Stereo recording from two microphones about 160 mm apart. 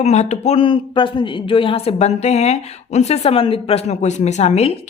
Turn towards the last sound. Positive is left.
turn(degrees=40)  # may be behind; listen again after turning